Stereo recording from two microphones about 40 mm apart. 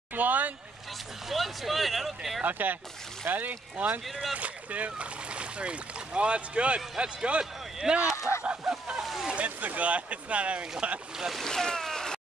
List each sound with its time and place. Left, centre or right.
0.1 s speech: right
1.3 s speech: centre
2.4 s speech: right
8.6 s a sound: centre
9.0 s a sound: centre
9.3 s speech: right
11.3 s speech: centre